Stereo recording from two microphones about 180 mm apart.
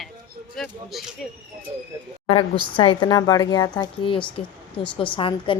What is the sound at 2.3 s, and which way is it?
A woman's voice, 30° left (ahead or behind).